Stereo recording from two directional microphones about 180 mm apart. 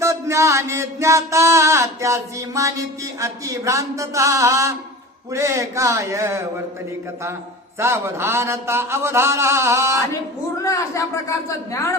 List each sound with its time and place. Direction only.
0.0 s music: 15° right (ahead or behind)
5.3 s a man's voice: 15° right (ahead or behind)
7.8 s a man's voice: 15° right (ahead or behind)
10.6 s speech: 15° left (ahead or behind)